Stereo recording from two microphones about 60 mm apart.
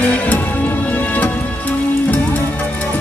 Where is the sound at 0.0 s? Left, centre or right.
Left.